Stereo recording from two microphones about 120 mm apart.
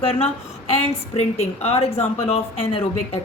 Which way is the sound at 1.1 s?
65° left (ahead or behind).